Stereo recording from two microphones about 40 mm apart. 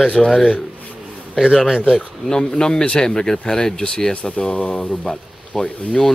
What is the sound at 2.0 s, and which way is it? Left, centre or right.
Speech, centre.